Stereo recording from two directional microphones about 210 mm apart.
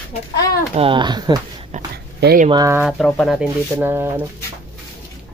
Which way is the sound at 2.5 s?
15° right (ahead or behind).